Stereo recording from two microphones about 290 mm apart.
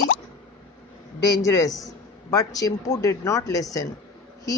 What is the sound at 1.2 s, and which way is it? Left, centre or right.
A man's voice, centre.